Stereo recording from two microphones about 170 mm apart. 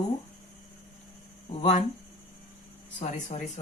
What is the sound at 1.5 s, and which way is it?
Speech, 40° left (ahead or behind).